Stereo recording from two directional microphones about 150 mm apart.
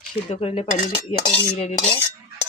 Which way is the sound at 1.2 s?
45° left (ahead or behind).